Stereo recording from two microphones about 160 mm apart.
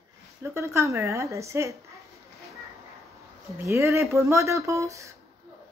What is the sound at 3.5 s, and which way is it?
Speech, 15° right (ahead or behind).